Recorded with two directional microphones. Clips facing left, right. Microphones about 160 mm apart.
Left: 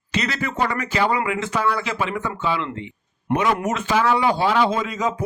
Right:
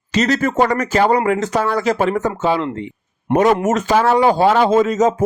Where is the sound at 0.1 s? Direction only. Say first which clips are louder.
Right 8 dB; 40° right (ahead or behind).